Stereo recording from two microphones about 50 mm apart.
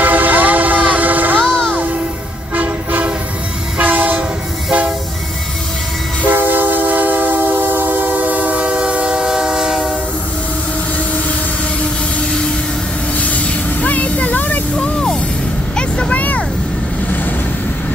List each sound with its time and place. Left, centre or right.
0.0 s vehicle: right
1.4 s music: centre
2.5 s train: right
6.2 s train: right; by 9.9 s centre
13.2 s vehicle: left
14.8 s music: centre
15.7 s vehicle: left